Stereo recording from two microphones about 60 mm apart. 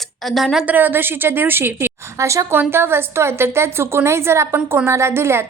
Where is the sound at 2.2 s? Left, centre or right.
Right.